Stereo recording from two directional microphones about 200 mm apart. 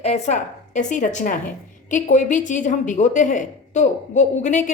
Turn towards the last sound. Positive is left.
turn(degrees=40)  # may be behind; listen again after turning